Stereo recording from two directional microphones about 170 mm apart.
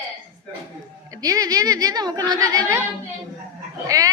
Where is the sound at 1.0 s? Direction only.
20° right (ahead or behind).